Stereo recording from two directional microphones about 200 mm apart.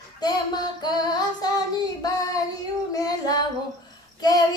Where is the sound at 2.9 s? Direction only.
20° left (ahead or behind).